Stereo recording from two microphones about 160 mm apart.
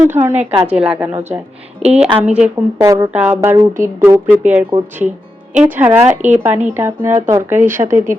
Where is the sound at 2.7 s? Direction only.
20° right (ahead or behind).